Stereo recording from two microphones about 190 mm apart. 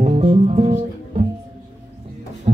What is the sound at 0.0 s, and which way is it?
Music, 35° right (ahead or behind).